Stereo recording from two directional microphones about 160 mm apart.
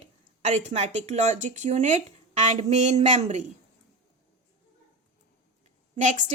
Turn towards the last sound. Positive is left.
turn(degrees=-45)  # may be behind; listen again after turning